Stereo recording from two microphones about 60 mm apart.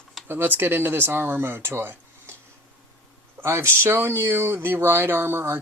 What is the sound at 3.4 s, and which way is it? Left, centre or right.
Speech, right.